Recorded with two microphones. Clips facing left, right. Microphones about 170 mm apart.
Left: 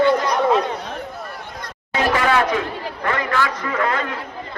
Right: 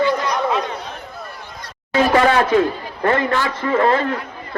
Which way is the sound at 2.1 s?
35° right (ahead or behind).